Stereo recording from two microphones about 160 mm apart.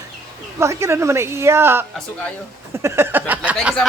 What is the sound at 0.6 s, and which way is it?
Speech, 15° right (ahead or behind).